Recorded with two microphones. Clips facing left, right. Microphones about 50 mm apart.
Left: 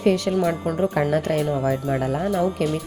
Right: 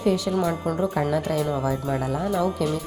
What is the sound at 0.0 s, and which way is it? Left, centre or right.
Music, left.